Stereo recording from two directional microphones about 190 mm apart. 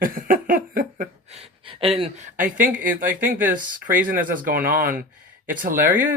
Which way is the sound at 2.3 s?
45° right (ahead or behind).